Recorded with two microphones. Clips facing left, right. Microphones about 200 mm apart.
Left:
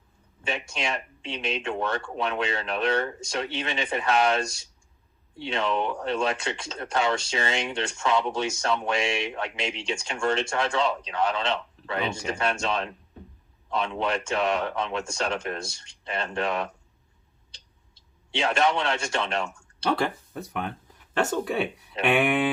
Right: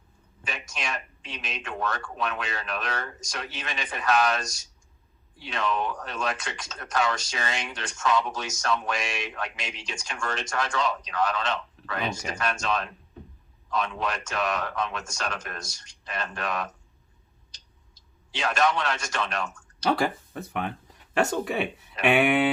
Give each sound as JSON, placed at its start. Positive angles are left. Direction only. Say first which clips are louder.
{"t": 0.4, "sound": "speech", "louder": "left 5 dB", "side_deg": 25}
{"t": 18.3, "sound": "speech", "louder": "left 1 dB", "side_deg": 25}
{"t": 19.9, "sound": "speech", "louder": "right 1 dB", "side_deg": -5}